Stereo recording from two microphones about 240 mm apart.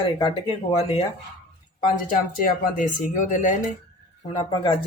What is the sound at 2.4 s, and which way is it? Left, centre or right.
Speech, left.